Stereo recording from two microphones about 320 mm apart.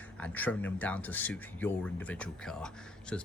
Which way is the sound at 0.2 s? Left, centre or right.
Centre.